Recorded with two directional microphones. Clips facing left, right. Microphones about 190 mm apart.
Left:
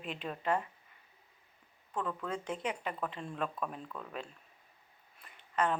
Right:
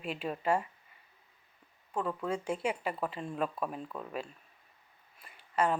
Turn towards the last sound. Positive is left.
turn(degrees=-10)  # may be behind; listen again after turning